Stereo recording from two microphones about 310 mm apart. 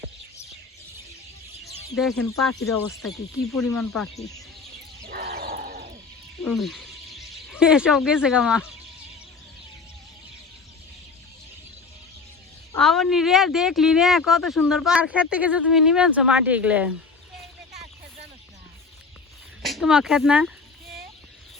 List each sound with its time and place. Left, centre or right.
1.6 s speech: centre
5.0 s a sound: right
6.4 s speech: centre
12.8 s speech: centre
19.6 s speech: centre